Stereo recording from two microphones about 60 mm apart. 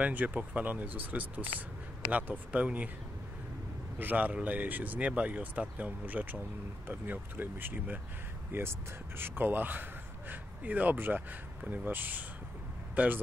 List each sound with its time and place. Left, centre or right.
0.0 s speech: right
4.0 s speech: right